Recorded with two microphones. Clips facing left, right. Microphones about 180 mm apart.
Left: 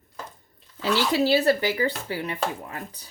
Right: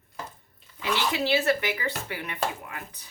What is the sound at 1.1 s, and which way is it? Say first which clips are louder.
Speech: left 5 dB; 35° left (ahead or behind).